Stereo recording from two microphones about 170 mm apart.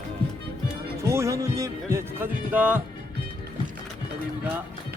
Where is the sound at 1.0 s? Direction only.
15° right (ahead or behind).